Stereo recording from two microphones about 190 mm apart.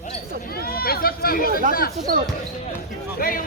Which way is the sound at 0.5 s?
50° left (ahead or behind).